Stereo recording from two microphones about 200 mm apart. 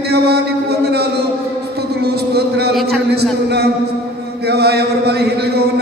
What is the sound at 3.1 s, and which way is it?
Speech, 55° right (ahead or behind).